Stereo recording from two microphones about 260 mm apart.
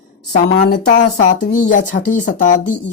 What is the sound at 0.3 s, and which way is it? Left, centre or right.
Speech, left.